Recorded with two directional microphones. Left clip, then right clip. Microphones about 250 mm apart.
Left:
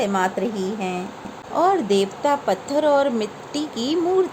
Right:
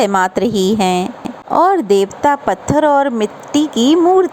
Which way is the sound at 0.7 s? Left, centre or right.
Right.